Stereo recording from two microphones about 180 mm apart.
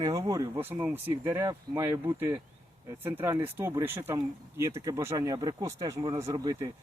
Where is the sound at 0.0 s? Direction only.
20° right (ahead or behind).